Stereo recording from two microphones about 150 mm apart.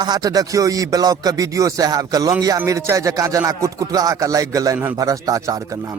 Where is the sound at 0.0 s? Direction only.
25° right (ahead or behind).